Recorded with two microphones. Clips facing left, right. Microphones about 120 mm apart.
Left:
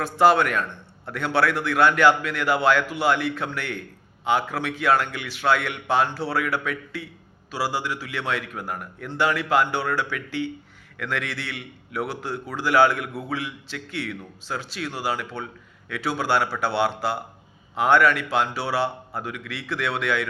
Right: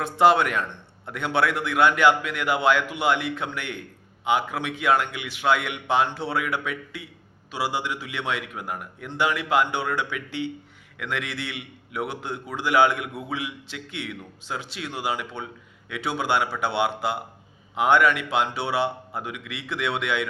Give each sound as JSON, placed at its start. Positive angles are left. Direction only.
{"t": 0.0, "sound": "a man's voice", "side_deg": -20}